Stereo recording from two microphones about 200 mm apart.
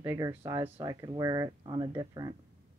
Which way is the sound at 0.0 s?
15° right (ahead or behind).